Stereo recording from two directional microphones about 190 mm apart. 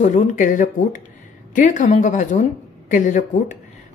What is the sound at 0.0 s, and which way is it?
Speech, 40° left (ahead or behind).